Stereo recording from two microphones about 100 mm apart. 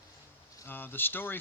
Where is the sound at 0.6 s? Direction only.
20° left (ahead or behind).